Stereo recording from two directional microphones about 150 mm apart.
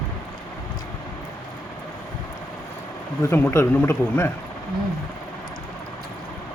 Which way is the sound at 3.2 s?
15° left (ahead or behind).